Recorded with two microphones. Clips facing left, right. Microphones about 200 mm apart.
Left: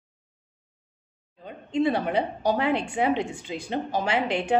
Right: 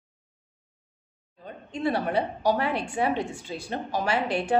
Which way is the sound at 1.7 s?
20° left (ahead or behind).